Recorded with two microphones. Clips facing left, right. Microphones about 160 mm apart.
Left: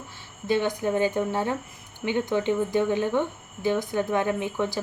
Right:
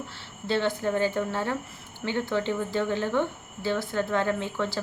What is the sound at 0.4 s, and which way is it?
Speech, 15° left (ahead or behind).